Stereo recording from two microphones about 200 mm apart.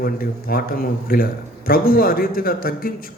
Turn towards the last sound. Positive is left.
turn(degrees=45)  # may be behind; listen again after turning